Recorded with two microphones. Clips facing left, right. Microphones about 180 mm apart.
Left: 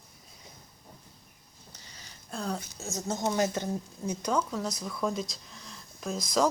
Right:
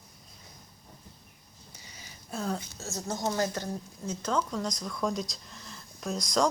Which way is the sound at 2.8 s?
20° left (ahead or behind).